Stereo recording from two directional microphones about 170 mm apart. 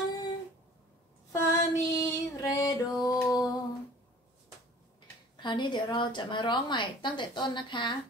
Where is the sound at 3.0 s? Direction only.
20° left (ahead or behind).